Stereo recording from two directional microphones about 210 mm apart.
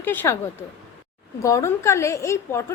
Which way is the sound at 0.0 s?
10° left (ahead or behind).